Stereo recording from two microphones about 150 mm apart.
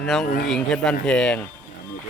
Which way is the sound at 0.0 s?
Centre (ahead or behind).